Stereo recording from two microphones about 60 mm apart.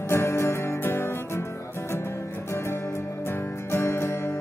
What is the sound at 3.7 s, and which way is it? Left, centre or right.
Music, left.